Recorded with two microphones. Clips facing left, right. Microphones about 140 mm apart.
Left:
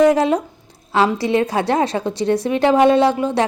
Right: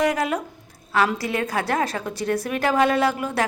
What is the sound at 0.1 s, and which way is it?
A woman's voice, 30° left (ahead or behind).